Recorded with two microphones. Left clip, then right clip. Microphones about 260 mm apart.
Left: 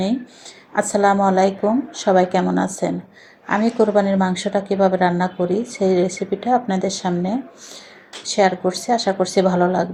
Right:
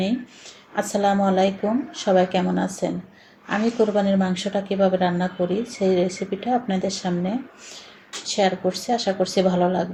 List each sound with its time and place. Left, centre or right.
0.8 s speech: left